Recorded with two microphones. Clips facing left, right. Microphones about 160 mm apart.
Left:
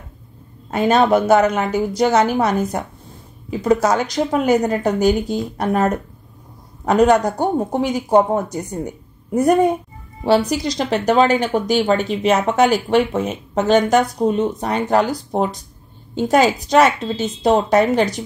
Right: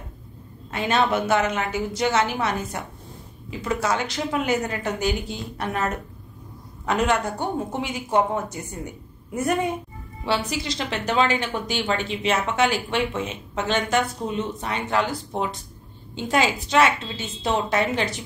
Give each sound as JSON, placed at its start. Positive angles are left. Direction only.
{"t": 0.7, "sound": "a woman's voice", "side_deg": 40}